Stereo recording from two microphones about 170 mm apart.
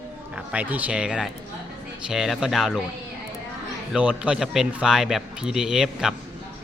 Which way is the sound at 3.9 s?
5° right (ahead or behind).